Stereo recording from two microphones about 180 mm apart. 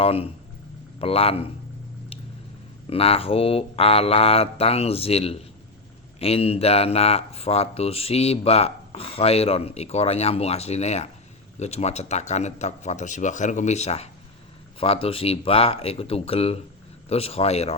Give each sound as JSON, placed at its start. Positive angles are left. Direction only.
{"t": 0.0, "sound": "speech", "side_deg": 30}
{"t": 2.9, "sound": "speech", "side_deg": 35}